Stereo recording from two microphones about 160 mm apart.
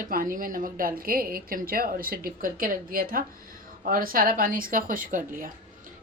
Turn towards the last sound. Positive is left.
turn(degrees=-60)  # may be behind; listen again after turning